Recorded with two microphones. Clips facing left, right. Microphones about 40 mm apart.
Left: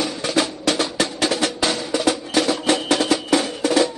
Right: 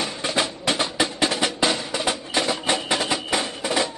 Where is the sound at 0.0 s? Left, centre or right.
Right.